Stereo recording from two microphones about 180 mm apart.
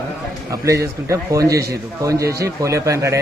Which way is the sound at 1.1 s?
20° right (ahead or behind).